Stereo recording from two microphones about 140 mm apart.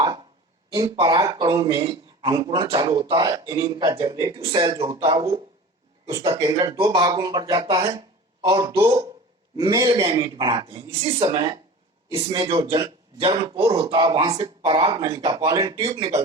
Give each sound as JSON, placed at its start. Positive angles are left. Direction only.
{"t": 0.0, "sound": "a sound", "side_deg": -40}
{"t": 0.9, "sound": "a man's voice", "side_deg": -30}
{"t": 4.8, "sound": "speech", "side_deg": -40}
{"t": 6.9, "sound": "a man's voice", "side_deg": -30}
{"t": 7.8, "sound": "a sound", "side_deg": -40}
{"t": 8.8, "sound": "a man's voice", "side_deg": -30}
{"t": 13.7, "sound": "speech", "side_deg": -30}
{"t": 15.4, "sound": "speech", "side_deg": -30}
{"t": 15.8, "sound": "speech", "side_deg": -40}